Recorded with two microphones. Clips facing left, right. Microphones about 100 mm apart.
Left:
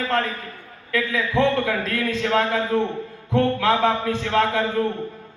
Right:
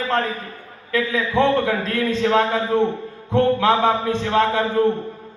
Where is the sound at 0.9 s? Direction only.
25° right (ahead or behind).